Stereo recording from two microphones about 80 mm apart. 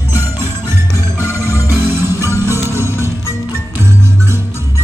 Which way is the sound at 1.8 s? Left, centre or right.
Right.